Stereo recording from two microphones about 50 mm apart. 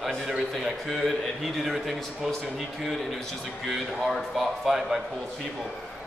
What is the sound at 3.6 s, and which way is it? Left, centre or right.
A man's voice, centre.